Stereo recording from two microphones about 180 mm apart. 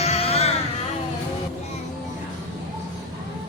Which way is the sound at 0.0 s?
35° left (ahead or behind).